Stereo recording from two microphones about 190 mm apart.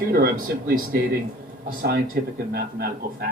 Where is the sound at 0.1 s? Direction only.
50° right (ahead or behind).